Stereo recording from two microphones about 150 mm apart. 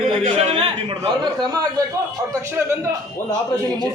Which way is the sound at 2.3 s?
20° right (ahead or behind).